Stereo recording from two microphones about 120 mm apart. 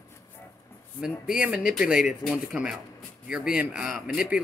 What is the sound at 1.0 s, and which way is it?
Speech, 5° right (ahead or behind).